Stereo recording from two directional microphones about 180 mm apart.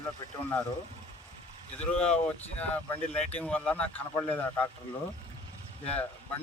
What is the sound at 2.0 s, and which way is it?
Speech, 10° left (ahead or behind).